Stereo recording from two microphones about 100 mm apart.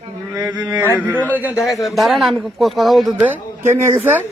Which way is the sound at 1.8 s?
Centre (ahead or behind).